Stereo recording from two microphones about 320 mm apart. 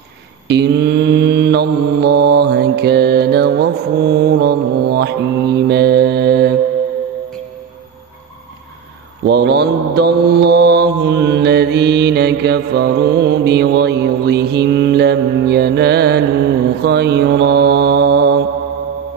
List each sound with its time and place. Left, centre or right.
0.5 s mantra: right
9.2 s mantra: right